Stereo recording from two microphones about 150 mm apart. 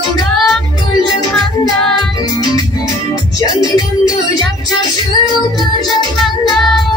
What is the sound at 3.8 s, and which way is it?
Music, 25° left (ahead or behind).